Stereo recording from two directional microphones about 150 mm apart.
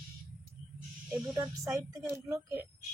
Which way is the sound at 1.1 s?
10° right (ahead or behind).